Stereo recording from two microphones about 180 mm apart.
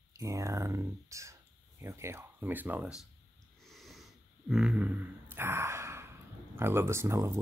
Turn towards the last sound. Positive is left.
turn(degrees=-15)  # may be behind; listen again after turning